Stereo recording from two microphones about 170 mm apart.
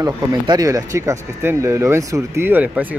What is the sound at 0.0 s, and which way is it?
Speech, 20° right (ahead or behind).